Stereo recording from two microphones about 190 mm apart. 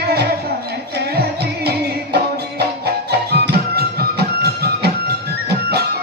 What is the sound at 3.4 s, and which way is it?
Music, 55° right (ahead or behind).